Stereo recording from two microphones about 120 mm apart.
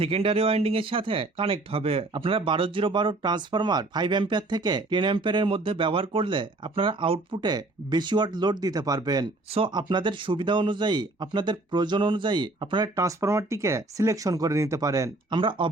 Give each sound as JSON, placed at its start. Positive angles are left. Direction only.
{"t": 0.0, "sound": "speech", "side_deg": -50}
{"t": 9.5, "sound": "speech", "side_deg": -50}
{"t": 9.7, "sound": "speech", "side_deg": -40}
{"t": 13.0, "sound": "speech", "side_deg": -25}
{"t": 15.3, "sound": "speech", "side_deg": -45}